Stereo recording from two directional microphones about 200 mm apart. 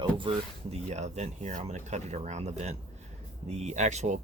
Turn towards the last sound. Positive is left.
turn(degrees=-35)  # may be behind; listen again after turning